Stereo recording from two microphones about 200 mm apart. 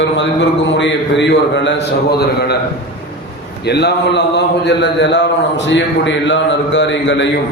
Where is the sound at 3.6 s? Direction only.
55° left (ahead or behind).